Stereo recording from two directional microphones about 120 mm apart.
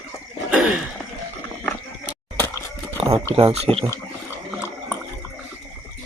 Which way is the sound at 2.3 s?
20° left (ahead or behind).